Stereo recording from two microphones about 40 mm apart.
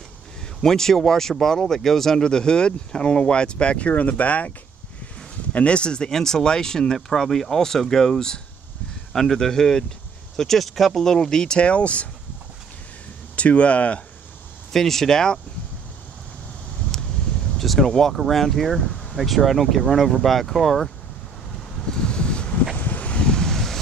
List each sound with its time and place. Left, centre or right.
0.6 s speech: centre; by 4.5 s left
5.5 s speech: left
13.4 s speech: left
14.7 s speech: centre
17.6 s speech: centre
21.9 s wind: left
22.8 s a sound: left
23.1 s wind: centre
23.5 s wind: centre